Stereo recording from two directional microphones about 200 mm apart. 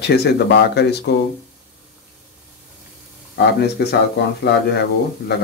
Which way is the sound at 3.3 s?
55° left (ahead or behind).